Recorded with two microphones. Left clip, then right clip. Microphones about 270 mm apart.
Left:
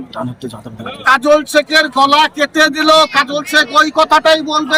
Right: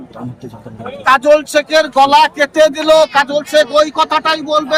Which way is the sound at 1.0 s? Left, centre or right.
Centre.